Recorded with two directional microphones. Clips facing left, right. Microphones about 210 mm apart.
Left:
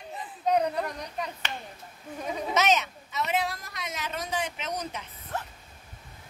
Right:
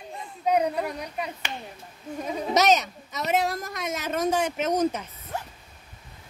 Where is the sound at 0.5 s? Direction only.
10° right (ahead or behind).